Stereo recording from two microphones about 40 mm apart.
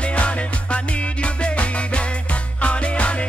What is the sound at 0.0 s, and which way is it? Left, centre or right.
Music, left.